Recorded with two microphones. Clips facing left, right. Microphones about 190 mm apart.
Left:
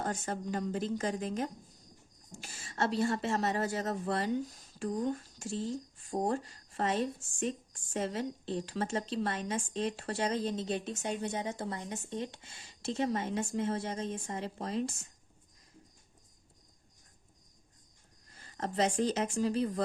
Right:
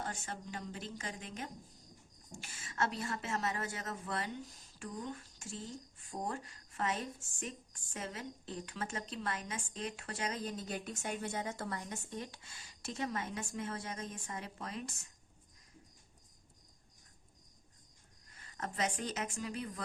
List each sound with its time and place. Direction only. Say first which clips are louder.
0.0 s a woman's voice: left 8 dB; 45° left (ahead or behind)
18.3 s speech: left 7 dB; 30° left (ahead or behind)